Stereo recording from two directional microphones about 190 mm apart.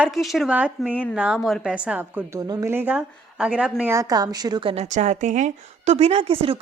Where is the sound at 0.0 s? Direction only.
Centre (ahead or behind).